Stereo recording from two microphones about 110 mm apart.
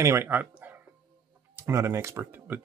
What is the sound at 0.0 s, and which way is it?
Speech, 20° right (ahead or behind).